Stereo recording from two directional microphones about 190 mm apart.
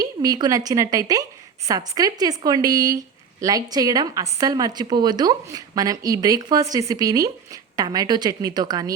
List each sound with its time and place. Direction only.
0.0 s a woman's voice: 20° right (ahead or behind)